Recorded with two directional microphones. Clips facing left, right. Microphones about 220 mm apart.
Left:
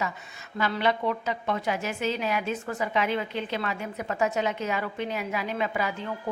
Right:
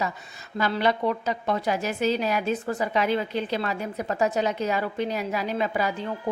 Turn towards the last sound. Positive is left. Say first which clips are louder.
# right 3 dB
turn(degrees=-35)  # may be behind; listen again after turning